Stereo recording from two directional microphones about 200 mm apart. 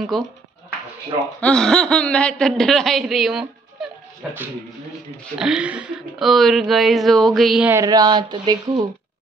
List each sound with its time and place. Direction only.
0.1 s speech: centre (ahead or behind)
1.4 s speech: 5° left (ahead or behind)
7.7 s speech: 20° right (ahead or behind)